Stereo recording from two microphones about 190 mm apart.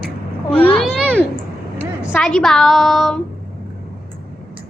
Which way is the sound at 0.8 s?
5° left (ahead or behind).